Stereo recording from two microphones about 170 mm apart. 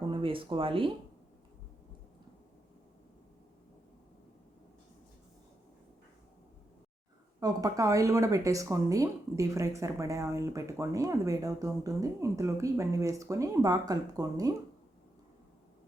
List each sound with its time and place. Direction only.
0.1 s speech: 30° right (ahead or behind)
7.3 s speech: 20° right (ahead or behind)